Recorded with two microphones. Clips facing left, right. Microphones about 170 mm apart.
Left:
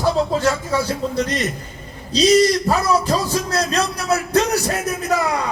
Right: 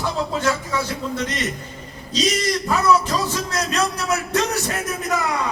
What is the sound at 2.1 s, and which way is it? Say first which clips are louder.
A man's voice: left 8 dB; 35° left (ahead or behind).